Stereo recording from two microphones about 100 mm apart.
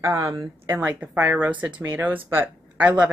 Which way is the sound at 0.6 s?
15° right (ahead or behind).